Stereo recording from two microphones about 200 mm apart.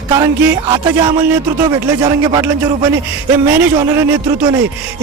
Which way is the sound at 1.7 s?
15° right (ahead or behind).